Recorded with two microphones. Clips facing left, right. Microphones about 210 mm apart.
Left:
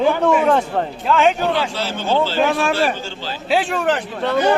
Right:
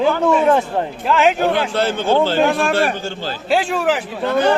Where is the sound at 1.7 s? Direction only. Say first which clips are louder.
Right 4 dB; 55° right (ahead or behind).